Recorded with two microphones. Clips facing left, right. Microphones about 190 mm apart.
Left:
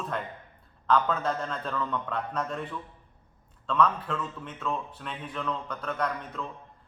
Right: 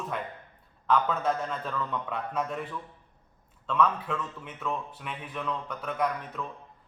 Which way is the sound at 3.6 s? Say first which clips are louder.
Left 1 dB; 5° right (ahead or behind).